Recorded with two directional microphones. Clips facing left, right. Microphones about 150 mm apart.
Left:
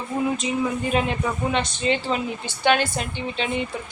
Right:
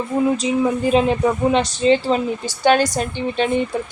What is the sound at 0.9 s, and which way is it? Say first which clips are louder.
A man's voice: right 8 dB; 30° right (ahead or behind).